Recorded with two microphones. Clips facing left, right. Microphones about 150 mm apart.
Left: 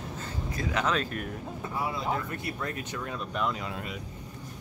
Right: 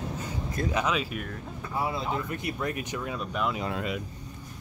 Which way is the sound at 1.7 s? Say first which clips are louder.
Right 2 dB; 25° right (ahead or behind).